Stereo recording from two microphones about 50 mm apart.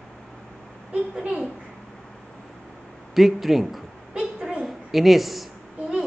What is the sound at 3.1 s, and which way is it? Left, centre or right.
Speech, centre.